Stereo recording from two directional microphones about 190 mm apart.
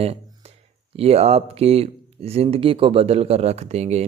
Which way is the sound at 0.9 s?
30° right (ahead or behind).